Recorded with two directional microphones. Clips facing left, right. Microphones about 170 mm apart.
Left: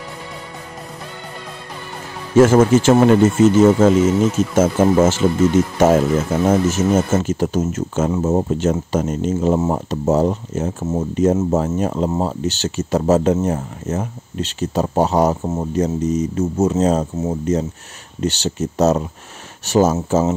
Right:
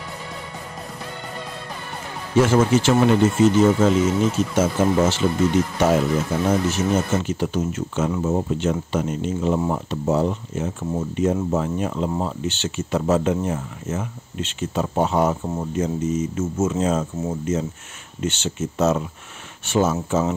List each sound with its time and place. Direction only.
2.3 s speech: 45° left (ahead or behind)
15.4 s speech: 20° left (ahead or behind)
15.7 s speech: 40° left (ahead or behind)